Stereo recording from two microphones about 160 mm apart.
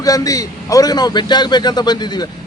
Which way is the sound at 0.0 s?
20° left (ahead or behind).